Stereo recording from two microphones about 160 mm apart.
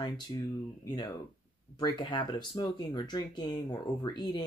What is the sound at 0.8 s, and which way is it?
Speech, 30° left (ahead or behind).